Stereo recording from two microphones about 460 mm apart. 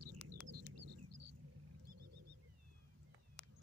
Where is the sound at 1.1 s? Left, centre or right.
Right.